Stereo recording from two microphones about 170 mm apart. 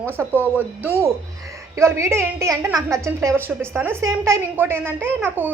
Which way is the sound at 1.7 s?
15° right (ahead or behind).